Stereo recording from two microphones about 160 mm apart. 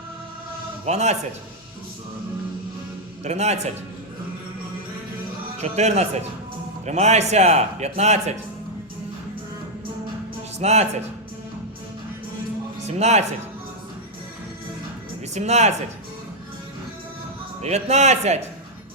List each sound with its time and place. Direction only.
0.9 s a man's voice: 45° right (ahead or behind)
3.2 s a man's voice: 45° right (ahead or behind)
5.5 s a man's voice: 45° right (ahead or behind)
10.6 s a man's voice: 45° right (ahead or behind)
13.0 s a man's voice: 45° right (ahead or behind)
15.4 s a man's voice: 45° right (ahead or behind)
17.6 s a man's voice: 45° right (ahead or behind)